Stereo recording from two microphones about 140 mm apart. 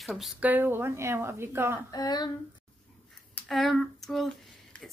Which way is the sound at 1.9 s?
30° left (ahead or behind).